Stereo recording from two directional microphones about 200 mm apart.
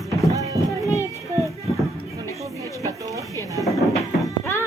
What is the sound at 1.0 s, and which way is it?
Child singing, 15° right (ahead or behind).